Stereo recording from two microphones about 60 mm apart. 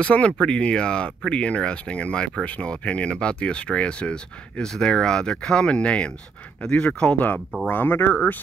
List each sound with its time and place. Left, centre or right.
0.0 s speech: left